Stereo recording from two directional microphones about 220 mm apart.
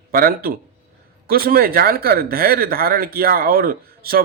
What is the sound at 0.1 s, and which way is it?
Speech, 40° right (ahead or behind).